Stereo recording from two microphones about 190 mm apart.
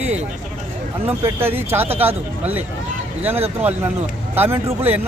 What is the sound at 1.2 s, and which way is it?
Speech, 10° right (ahead or behind).